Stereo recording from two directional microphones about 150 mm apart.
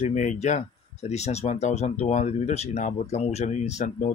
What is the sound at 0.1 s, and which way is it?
Speech, 55° left (ahead or behind).